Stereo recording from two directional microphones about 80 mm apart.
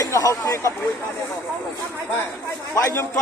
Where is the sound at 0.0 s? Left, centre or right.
Left.